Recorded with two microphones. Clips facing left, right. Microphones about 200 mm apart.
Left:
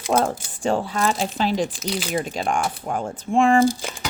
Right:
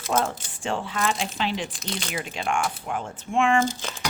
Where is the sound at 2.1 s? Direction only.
40° left (ahead or behind).